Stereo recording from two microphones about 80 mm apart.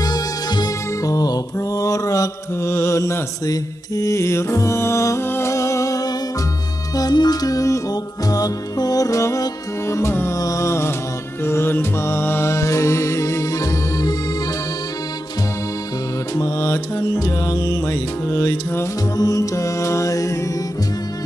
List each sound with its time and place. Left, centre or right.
0.0 s music: left
1.0 s mantra: left
7.0 s music: left
10.4 s a sound: left
11.4 s music: left
16.3 s music: left